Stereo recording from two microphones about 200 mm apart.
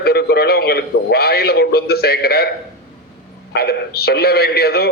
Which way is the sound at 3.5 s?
50° left (ahead or behind).